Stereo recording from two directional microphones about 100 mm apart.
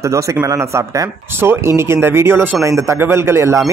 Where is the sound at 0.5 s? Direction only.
30° right (ahead or behind).